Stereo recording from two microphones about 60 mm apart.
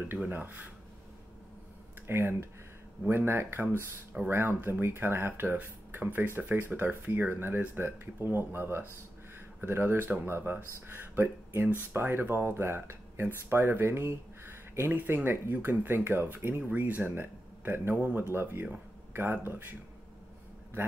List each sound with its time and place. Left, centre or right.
0.3 s speech: right
2.0 s speech: right
14.9 s speech: right